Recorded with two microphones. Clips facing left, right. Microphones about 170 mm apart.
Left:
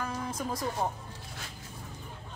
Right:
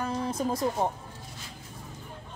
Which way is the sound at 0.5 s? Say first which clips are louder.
Right 4 dB; 25° right (ahead or behind).